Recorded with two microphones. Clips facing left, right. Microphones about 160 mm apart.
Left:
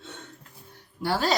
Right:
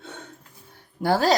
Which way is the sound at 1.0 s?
45° right (ahead or behind).